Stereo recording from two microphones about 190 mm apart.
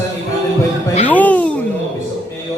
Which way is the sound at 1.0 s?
10° left (ahead or behind).